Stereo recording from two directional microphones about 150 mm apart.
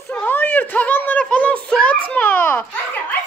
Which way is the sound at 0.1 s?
10° left (ahead or behind).